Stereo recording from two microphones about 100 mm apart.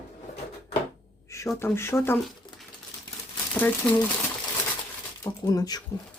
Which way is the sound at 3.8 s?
10° left (ahead or behind).